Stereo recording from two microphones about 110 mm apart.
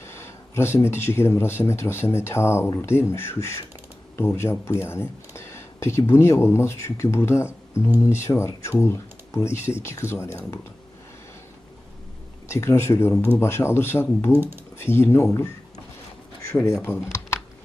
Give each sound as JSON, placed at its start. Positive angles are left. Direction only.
{"t": 0.0, "sound": "speech", "side_deg": 25}
{"t": 12.5, "sound": "speech", "side_deg": 25}
{"t": 14.3, "sound": "speech", "side_deg": -20}
{"t": 14.8, "sound": "speech", "side_deg": 20}
{"t": 16.6, "sound": "speech", "side_deg": 25}